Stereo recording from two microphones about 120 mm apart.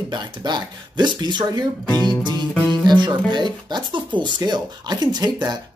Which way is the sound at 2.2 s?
40° right (ahead or behind).